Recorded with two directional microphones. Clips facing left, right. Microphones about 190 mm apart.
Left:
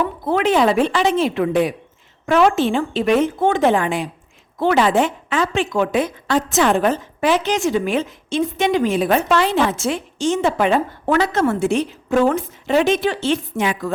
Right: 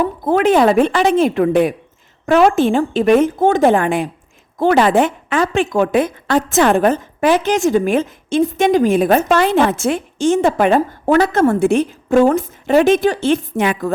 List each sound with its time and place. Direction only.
0.0 s a woman's voice: 45° right (ahead or behind)